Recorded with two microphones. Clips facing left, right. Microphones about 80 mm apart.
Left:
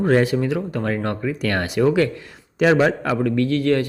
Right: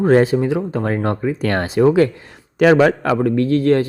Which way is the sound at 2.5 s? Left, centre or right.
Right.